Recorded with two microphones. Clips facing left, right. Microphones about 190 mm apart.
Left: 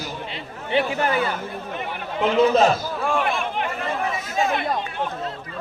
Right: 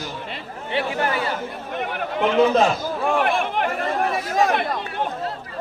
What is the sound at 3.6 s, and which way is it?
Chatter, 55° right (ahead or behind).